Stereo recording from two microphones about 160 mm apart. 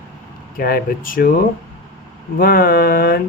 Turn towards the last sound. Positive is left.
turn(degrees=65)  # may be behind; listen again after turning